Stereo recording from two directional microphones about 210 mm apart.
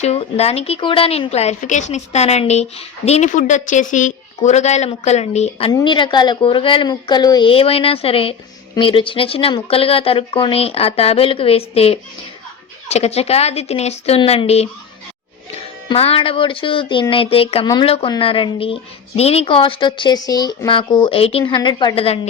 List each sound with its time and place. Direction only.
0.0 s speech: 30° left (ahead or behind)